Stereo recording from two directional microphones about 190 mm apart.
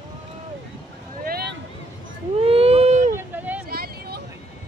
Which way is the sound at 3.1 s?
10° right (ahead or behind).